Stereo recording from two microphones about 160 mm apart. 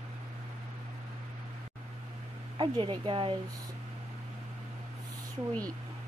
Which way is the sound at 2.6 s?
30° right (ahead or behind).